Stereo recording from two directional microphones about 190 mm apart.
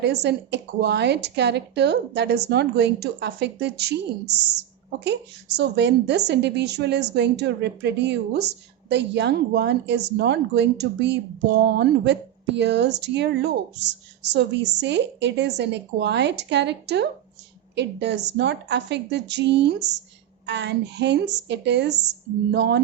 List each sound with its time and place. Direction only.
0.0 s speech: 60° right (ahead or behind)